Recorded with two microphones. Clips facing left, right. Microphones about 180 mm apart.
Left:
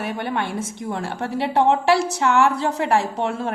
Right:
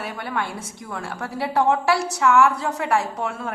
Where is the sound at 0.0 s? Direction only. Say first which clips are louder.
Left 3 dB; 25° left (ahead or behind).